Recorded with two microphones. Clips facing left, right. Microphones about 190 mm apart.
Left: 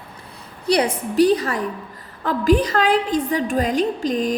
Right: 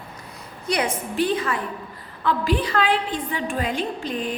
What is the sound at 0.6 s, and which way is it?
A woman's voice, 35° left (ahead or behind).